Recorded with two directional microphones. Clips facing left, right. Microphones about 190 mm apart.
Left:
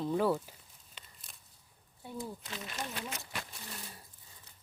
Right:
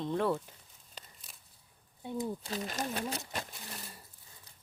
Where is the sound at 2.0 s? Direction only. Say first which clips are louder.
Right 5 dB; 20° right (ahead or behind).